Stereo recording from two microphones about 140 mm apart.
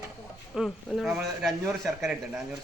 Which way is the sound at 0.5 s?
Centre (ahead or behind).